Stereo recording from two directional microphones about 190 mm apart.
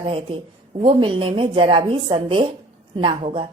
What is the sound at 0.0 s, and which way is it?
A woman's voice, 30° right (ahead or behind).